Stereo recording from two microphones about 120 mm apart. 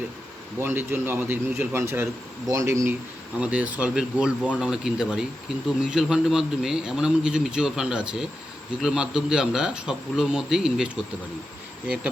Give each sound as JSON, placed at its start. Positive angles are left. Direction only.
{"t": 0.6, "sound": "a man's voice", "side_deg": -20}
{"t": 3.4, "sound": "a man's voice", "side_deg": -10}